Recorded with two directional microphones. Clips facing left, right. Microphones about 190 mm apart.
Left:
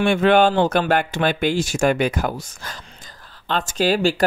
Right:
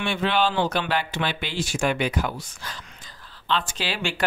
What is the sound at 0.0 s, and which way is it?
Speech, 50° left (ahead or behind).